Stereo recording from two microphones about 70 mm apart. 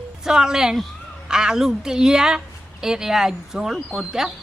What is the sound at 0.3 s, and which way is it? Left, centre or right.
Speech, centre.